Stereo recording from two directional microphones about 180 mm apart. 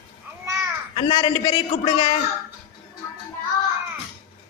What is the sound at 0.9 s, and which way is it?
A woman's voice, 25° left (ahead or behind).